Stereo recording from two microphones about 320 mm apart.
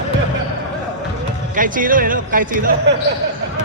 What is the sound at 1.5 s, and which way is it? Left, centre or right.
Speech, right.